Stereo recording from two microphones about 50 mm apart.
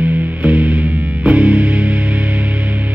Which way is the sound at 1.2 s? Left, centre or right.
Right.